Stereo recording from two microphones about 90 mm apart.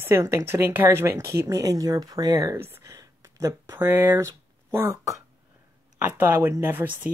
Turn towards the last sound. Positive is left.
turn(degrees=-25)  # may be behind; listen again after turning